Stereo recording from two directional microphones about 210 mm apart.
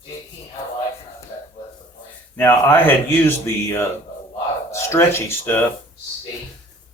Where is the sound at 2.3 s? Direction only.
10° left (ahead or behind).